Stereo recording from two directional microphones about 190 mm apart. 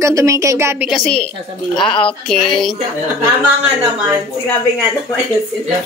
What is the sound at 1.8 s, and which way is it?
Speech, 25° left (ahead or behind).